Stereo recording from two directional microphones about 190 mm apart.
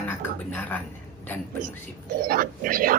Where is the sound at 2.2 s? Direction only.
50° right (ahead or behind).